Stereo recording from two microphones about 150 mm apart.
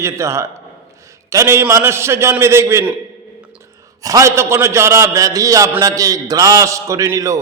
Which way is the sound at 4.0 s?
20° right (ahead or behind).